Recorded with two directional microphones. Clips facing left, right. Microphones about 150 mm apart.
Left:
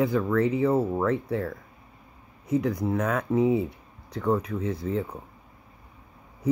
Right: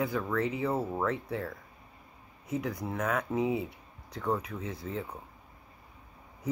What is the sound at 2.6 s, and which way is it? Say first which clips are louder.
Speech: left 7 dB; centre (ahead or behind).